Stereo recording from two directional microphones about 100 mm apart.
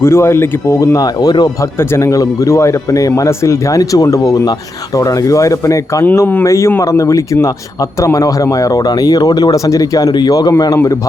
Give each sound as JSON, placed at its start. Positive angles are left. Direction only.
{"t": 0.0, "sound": "speech", "side_deg": 25}
{"t": 1.8, "sound": "speech", "side_deg": 30}